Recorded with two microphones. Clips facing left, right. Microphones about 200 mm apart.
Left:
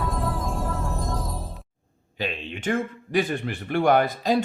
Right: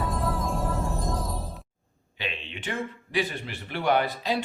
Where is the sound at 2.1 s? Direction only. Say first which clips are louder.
Left 5 dB; 40° left (ahead or behind).